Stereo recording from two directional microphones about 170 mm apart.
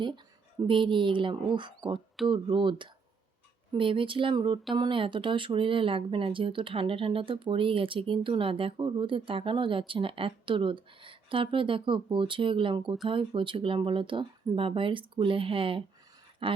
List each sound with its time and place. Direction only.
0.7 s a woman's voice: 30° right (ahead or behind)